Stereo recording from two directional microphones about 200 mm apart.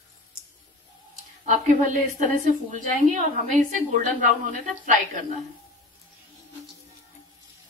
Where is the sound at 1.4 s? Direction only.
40° right (ahead or behind).